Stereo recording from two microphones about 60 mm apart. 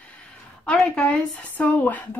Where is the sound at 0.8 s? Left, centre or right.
Left.